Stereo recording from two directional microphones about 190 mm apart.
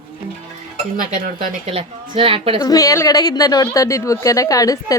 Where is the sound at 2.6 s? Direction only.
20° left (ahead or behind).